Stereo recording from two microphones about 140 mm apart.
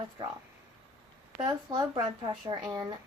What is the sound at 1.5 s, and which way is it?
A woman's voice, 30° right (ahead or behind).